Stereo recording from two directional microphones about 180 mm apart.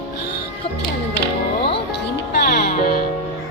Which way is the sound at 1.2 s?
65° left (ahead or behind).